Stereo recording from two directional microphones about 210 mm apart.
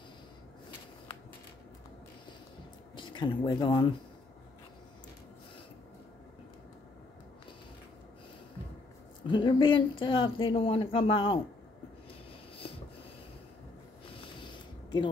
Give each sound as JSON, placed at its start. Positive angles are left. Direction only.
{"t": 3.0, "sound": "speech", "side_deg": 20}
{"t": 9.3, "sound": "speech", "side_deg": 20}